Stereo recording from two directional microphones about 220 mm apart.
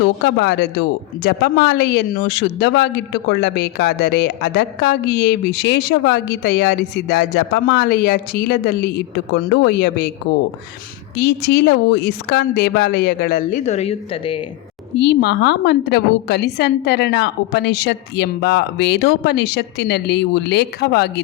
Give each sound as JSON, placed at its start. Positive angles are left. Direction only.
{"t": 0.0, "sound": "speech", "side_deg": 50}
{"t": 11.2, "sound": "speech", "side_deg": 45}
{"t": 14.9, "sound": "speech", "side_deg": 50}